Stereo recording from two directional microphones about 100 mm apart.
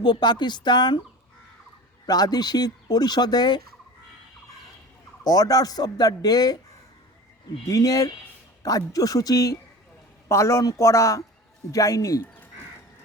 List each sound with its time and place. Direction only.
0.0 s speech: 50° left (ahead or behind)
2.0 s speech: 40° left (ahead or behind)
5.2 s speech: 40° left (ahead or behind)
7.6 s speech: 35° left (ahead or behind)
12.2 s crow: 20° left (ahead or behind)